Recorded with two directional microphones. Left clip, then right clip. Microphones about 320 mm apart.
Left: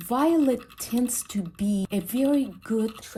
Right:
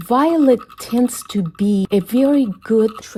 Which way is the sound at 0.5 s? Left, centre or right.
Centre.